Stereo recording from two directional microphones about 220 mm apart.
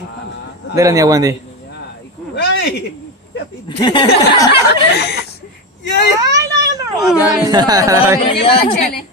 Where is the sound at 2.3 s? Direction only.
50° left (ahead or behind).